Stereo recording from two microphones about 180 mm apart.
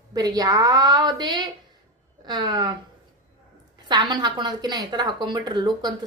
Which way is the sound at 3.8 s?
25° right (ahead or behind).